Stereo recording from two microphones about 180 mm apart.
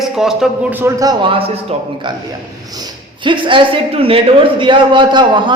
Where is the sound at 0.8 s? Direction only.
20° right (ahead or behind).